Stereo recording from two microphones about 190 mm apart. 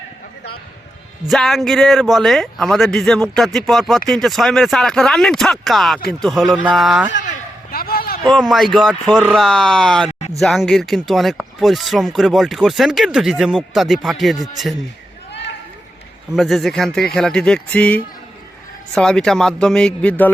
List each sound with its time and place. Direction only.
1.2 s speech: centre (ahead or behind)
7.2 s a sound: 45° left (ahead or behind)
8.2 s speech: centre (ahead or behind)
10.1 s a sound: 35° left (ahead or behind)
10.4 s speech: centre (ahead or behind)
16.3 s speech: centre (ahead or behind)